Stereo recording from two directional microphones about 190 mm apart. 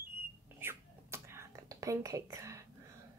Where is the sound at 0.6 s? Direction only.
15° right (ahead or behind).